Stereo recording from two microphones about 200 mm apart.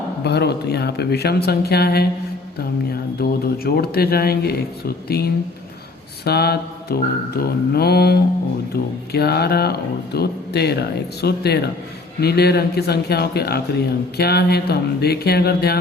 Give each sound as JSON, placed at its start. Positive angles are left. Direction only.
{"t": 0.3, "sound": "speech", "side_deg": 55}
{"t": 3.2, "sound": "speech", "side_deg": 50}